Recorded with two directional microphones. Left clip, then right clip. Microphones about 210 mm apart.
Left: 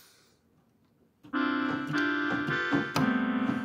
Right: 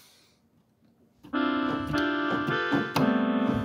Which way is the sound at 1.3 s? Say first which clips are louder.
Right 2 dB; 25° left (ahead or behind).